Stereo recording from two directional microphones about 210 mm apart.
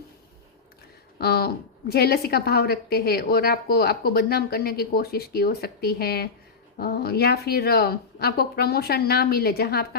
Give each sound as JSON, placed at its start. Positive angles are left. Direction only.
{"t": 1.2, "sound": "a woman's voice", "side_deg": 50}